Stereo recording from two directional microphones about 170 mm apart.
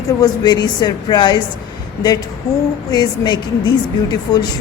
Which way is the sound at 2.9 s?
25° left (ahead or behind).